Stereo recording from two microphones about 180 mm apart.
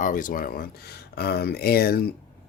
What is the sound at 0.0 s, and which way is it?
Speech, 50° left (ahead or behind).